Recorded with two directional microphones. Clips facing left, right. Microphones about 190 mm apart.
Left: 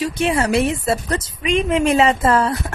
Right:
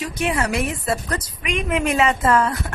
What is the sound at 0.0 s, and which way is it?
A woman's voice, 30° left (ahead or behind).